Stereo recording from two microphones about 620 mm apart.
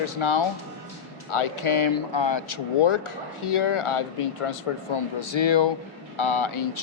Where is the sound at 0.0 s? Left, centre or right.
Left.